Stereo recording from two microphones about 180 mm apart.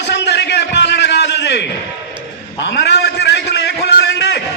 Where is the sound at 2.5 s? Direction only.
75° left (ahead or behind).